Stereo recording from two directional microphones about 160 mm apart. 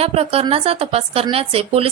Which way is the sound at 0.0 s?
40° right (ahead or behind).